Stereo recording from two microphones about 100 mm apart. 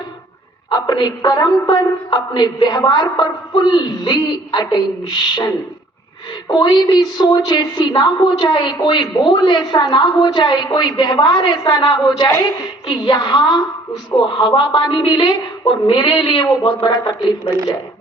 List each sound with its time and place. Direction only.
0.7 s a woman's voice: 45° left (ahead or behind)
1.6 s speech: 35° left (ahead or behind)
2.1 s a woman's voice: 50° left (ahead or behind)